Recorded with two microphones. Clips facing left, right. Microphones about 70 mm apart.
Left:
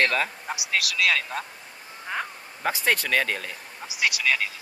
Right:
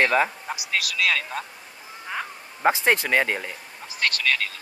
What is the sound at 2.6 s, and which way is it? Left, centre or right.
Speech, right.